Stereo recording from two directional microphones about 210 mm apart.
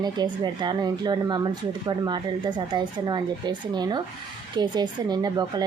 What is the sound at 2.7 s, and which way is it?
A woman's voice, 20° right (ahead or behind).